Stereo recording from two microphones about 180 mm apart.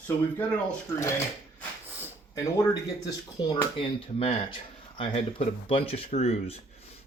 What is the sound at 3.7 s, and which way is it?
Speech, 30° left (ahead or behind).